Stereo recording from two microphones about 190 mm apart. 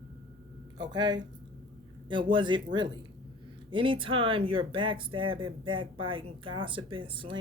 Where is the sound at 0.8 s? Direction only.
20° right (ahead or behind).